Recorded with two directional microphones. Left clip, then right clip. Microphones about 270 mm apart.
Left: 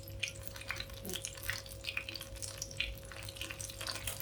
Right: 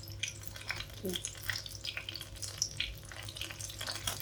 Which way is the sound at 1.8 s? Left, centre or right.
Centre.